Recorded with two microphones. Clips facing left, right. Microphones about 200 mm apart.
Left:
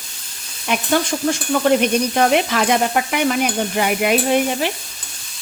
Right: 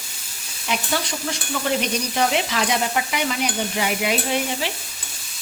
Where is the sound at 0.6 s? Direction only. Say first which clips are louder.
Left 6 dB; 55° left (ahead or behind).